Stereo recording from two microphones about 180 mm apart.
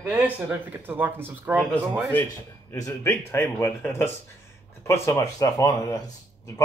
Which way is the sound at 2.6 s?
15° left (ahead or behind).